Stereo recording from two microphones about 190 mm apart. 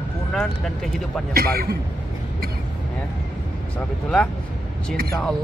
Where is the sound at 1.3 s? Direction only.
55° right (ahead or behind).